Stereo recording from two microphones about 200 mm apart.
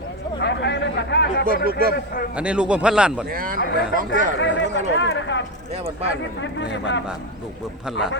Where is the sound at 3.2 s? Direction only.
45° right (ahead or behind).